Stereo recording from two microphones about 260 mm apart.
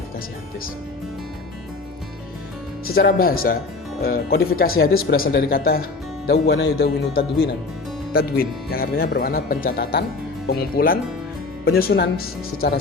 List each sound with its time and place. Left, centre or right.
2.8 s speech: left